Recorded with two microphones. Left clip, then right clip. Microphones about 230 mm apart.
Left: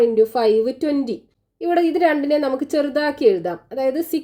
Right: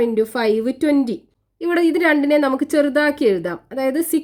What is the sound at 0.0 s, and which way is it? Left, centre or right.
A woman's voice, right.